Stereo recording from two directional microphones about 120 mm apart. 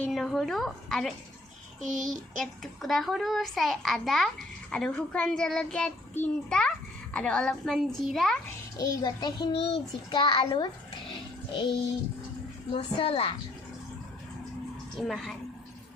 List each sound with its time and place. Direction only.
0.1 s a child's voice: centre (ahead or behind)
8.8 s a child's voice: 35° left (ahead or behind)
9.5 s child singing: 50° left (ahead or behind)
12.7 s child singing: 50° left (ahead or behind)
14.9 s a child's voice: centre (ahead or behind)